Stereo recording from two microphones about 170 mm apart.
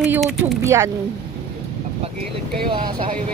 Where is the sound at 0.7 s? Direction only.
15° right (ahead or behind).